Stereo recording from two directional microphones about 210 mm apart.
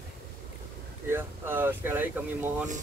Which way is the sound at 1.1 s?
10° right (ahead or behind).